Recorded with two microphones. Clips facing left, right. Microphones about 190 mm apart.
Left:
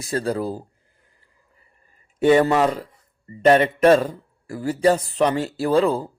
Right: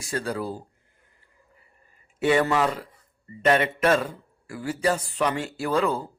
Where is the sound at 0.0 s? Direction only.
35° left (ahead or behind).